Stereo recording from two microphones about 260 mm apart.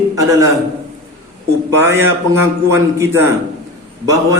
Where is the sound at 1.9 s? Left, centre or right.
Centre.